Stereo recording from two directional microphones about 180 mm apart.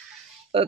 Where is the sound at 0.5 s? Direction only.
30° right (ahead or behind).